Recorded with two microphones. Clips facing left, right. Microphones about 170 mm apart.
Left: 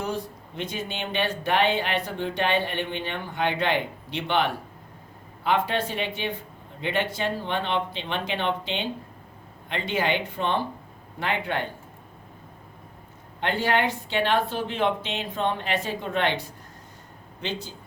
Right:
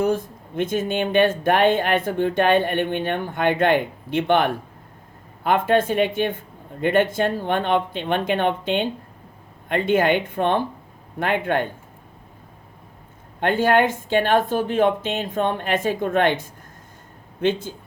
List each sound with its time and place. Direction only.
0.0 s speech: 50° right (ahead or behind)
13.4 s speech: 50° right (ahead or behind)